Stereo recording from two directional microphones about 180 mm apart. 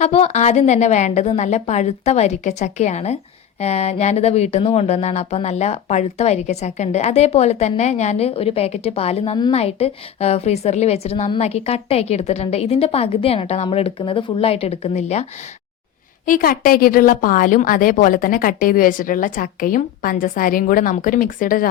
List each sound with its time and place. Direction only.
0.0 s speech: 35° left (ahead or behind)
16.2 s a woman's voice: 50° left (ahead or behind)